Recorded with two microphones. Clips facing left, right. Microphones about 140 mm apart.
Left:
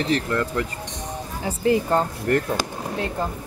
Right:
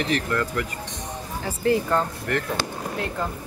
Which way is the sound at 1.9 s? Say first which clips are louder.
Left 3 dB; 35° left (ahead or behind).